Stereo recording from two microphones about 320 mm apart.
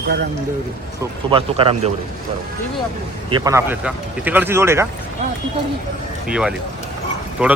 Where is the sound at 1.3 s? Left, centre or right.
Centre.